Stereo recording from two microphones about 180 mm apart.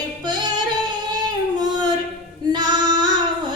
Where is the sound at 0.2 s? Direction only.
25° right (ahead or behind).